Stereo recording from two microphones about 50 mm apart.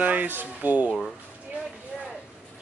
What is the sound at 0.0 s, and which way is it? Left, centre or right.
Speech, right.